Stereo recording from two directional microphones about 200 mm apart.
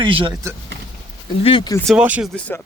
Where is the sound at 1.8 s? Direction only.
Centre (ahead or behind).